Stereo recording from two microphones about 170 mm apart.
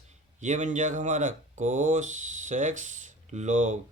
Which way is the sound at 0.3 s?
45° right (ahead or behind).